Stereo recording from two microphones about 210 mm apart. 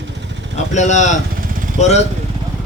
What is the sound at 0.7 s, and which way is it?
Speech, 35° left (ahead or behind).